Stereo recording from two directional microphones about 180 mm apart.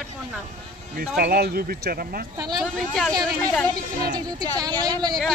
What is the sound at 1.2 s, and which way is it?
Speech, 60° right (ahead or behind).